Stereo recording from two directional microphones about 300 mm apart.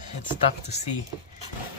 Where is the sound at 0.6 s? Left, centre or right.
Left.